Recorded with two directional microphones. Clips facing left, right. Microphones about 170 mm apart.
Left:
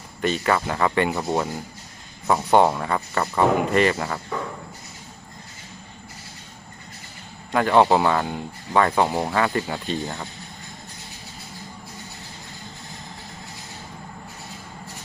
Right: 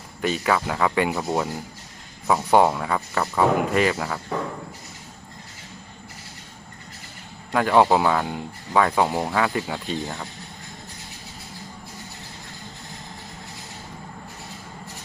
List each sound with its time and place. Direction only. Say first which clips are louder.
0.2 s speech: left 1 dB; 5° right (ahead or behind)
7.5 s speech: left 1 dB; 5° right (ahead or behind)